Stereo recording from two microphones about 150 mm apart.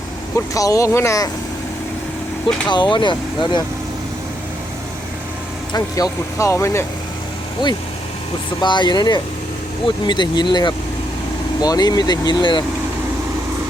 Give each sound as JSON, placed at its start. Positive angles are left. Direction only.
{"t": 0.3, "sound": "speech", "side_deg": 20}
{"t": 2.6, "sound": "speech", "side_deg": 30}
{"t": 5.7, "sound": "speech", "side_deg": 20}
{"t": 8.6, "sound": "speech", "side_deg": 30}